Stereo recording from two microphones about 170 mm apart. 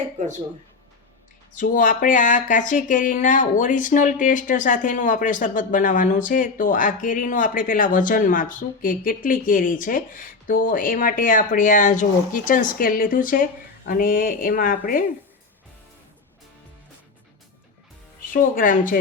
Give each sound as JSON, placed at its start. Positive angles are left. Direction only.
{"t": 0.2, "sound": "speech", "side_deg": -45}
{"t": 1.5, "sound": "speech", "side_deg": 50}
{"t": 18.3, "sound": "speech", "side_deg": 55}